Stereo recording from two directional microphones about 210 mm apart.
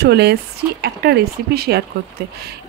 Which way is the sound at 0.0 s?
50° right (ahead or behind).